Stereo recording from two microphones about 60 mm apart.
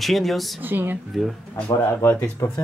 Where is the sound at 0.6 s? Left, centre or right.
Right.